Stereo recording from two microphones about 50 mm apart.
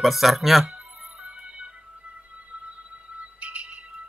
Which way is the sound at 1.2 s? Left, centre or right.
Right.